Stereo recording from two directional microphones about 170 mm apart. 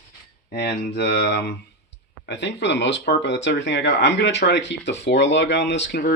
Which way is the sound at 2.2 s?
90° left.